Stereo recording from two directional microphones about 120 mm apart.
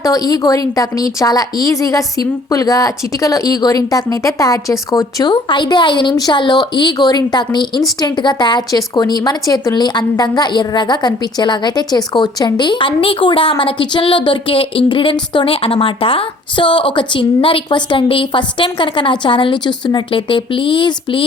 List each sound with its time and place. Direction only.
0.0 s speech: 30° left (ahead or behind)